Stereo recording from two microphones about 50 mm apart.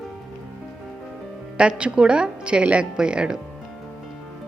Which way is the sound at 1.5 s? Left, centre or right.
Right.